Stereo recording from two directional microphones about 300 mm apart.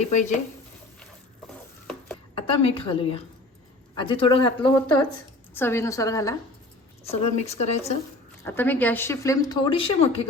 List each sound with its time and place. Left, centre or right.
2.3 s a woman's voice: centre
7.1 s speech: left
8.4 s a woman's voice: centre